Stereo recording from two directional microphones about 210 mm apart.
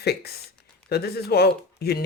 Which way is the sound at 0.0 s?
50° left (ahead or behind).